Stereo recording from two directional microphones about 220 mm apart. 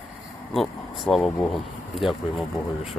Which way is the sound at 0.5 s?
Centre (ahead or behind).